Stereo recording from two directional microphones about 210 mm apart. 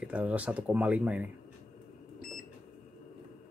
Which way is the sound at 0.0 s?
5° right (ahead or behind).